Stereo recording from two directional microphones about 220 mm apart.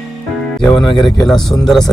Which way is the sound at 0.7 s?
20° left (ahead or behind).